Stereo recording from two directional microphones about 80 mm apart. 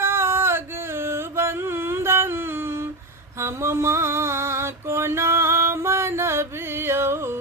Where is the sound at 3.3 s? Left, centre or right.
Right.